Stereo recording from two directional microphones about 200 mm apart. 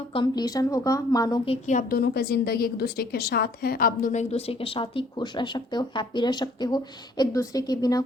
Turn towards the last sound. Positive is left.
turn(degrees=20)  # may be behind; listen again after turning